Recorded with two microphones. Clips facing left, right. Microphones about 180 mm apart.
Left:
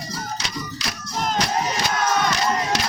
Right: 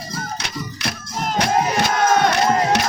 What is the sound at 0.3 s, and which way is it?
Music, 60° right (ahead or behind).